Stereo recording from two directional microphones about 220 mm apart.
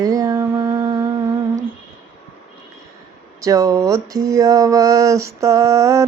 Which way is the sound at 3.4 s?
15° right (ahead or behind).